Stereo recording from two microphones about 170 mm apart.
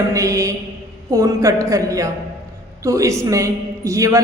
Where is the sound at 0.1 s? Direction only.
20° right (ahead or behind).